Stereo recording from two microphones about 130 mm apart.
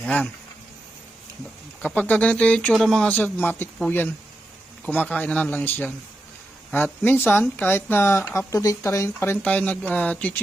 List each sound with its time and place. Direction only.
0.0 s speech: 10° left (ahead or behind)
1.8 s speech: 10° left (ahead or behind)